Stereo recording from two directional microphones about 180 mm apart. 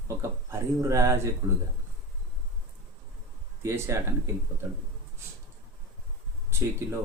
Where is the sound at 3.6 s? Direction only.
15° right (ahead or behind).